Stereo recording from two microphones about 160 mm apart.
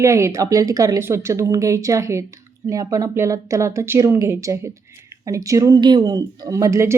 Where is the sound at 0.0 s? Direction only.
20° right (ahead or behind).